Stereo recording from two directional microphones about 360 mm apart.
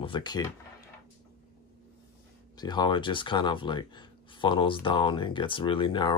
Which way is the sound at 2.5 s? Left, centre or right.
Centre.